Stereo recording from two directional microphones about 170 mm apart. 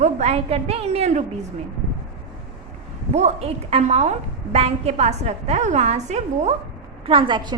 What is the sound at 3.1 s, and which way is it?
A woman's voice, 40° right (ahead or behind).